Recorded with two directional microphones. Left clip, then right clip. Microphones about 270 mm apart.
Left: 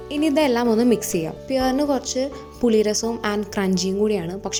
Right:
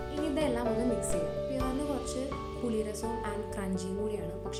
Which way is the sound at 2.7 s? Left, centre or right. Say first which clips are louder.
Left 15 dB; left.